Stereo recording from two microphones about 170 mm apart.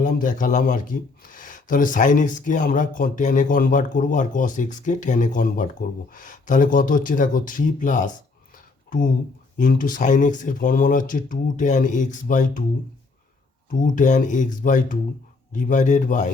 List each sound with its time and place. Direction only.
0.0 s speech: 50° left (ahead or behind)
8.5 s a sound: 55° left (ahead or behind)
9.6 s speech: 50° left (ahead or behind)
13.7 s speech: 50° left (ahead or behind)